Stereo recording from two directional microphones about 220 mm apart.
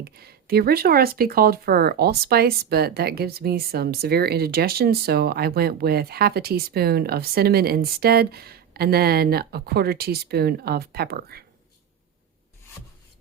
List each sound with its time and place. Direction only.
0.0 s speech: 45° right (ahead or behind)